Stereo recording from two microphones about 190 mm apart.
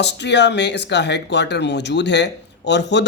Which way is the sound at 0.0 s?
65° left (ahead or behind).